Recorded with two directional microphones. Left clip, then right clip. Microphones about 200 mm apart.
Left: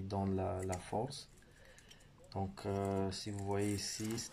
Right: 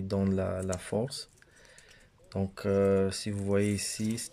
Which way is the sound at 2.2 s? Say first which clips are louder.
Right 9 dB; 55° right (ahead or behind).